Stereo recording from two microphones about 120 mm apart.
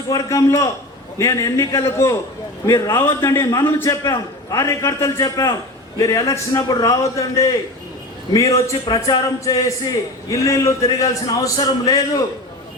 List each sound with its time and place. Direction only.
0.1 s a man's voice: 25° left (ahead or behind)